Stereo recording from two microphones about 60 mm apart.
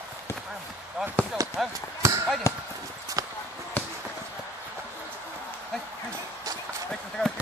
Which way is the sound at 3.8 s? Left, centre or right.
Left.